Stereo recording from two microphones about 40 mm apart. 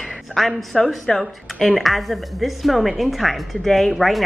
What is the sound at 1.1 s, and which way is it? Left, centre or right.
Speech, centre.